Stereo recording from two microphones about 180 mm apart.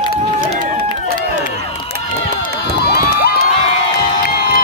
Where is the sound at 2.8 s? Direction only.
60° left (ahead or behind).